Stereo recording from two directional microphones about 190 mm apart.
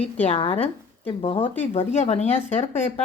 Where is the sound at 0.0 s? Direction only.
30° left (ahead or behind).